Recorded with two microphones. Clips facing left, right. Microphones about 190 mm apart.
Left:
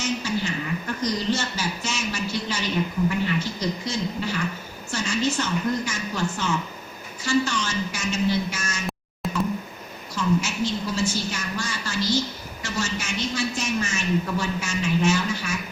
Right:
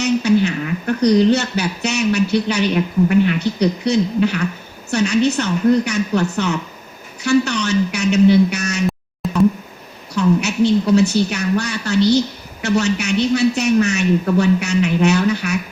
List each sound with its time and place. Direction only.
0.0 s a woman's voice: 65° right (ahead or behind)
9.2 s a sound: centre (ahead or behind)
10.2 s a man's voice: 65° right (ahead or behind)